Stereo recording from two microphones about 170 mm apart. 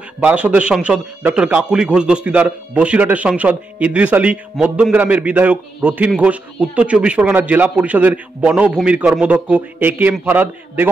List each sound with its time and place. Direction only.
0.2 s a man's voice: 10° right (ahead or behind)